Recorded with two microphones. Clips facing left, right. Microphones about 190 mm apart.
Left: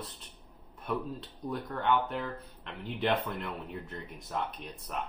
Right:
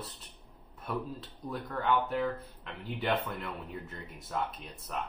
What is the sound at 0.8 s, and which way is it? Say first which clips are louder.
Speech: left 2 dB; centre (ahead or behind).